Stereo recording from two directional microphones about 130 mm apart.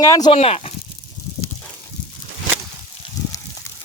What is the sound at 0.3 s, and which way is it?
Speech, 50° left (ahead or behind).